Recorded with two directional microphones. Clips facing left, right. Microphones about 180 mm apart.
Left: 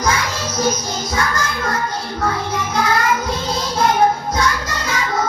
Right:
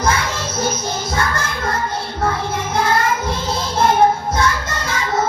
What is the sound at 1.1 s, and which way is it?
Music, 55° right (ahead or behind).